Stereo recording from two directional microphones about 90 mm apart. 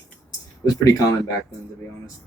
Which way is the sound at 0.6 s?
40° left (ahead or behind).